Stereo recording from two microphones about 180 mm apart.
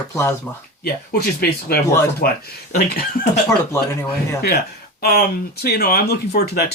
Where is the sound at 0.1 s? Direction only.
15° left (ahead or behind).